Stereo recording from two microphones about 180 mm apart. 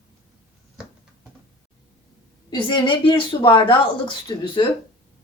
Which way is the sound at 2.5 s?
25° left (ahead or behind).